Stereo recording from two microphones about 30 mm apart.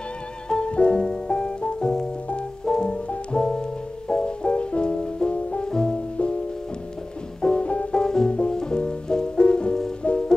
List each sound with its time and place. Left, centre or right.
0.5 s music: left
2.6 s music: left
7.5 s music: left
7.9 s music: left